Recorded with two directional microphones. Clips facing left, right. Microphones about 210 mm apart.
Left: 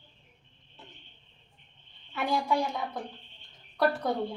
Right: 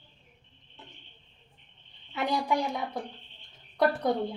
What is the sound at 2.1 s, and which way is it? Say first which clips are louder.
Speech: even; 15° right (ahead or behind).